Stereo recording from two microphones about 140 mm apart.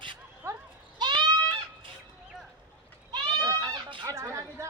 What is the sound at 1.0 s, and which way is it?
Goat, 30° right (ahead or behind).